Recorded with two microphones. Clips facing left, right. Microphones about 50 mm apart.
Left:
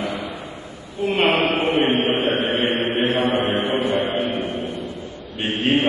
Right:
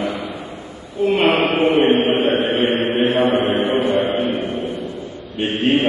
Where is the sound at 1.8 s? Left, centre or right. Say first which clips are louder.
Right 4 dB; centre.